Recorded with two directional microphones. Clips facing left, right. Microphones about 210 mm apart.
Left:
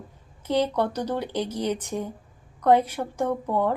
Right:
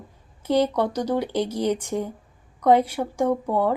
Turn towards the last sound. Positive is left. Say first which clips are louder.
# right 3 dB
turn(degrees=-10)  # may be behind; listen again after turning